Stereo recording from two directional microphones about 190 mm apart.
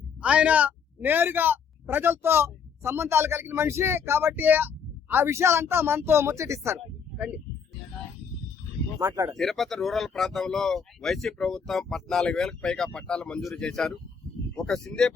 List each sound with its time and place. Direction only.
0.2 s speech: 5° right (ahead or behind)
9.0 s speech: 15° right (ahead or behind)
9.3 s speech: centre (ahead or behind)